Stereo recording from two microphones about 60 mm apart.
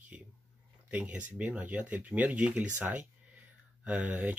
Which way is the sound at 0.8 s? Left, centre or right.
Right.